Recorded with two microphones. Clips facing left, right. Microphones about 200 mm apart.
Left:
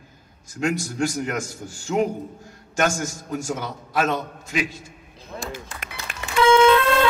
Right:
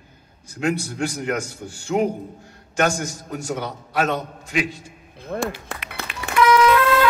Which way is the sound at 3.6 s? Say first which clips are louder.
Right 2 dB; 40° right (ahead or behind).